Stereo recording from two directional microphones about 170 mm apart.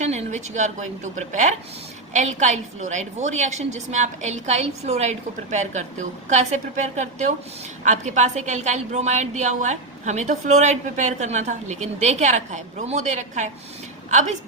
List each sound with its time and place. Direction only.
0.0 s a woman's voice: 40° right (ahead or behind)